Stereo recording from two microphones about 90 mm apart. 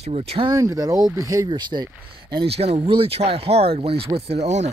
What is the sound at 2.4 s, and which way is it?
Speech, 90° right.